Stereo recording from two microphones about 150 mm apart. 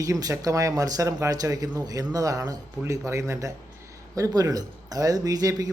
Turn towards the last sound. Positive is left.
turn(degrees=-25)  # may be behind; listen again after turning